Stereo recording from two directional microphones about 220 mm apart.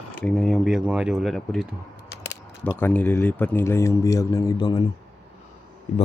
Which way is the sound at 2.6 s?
10° left (ahead or behind).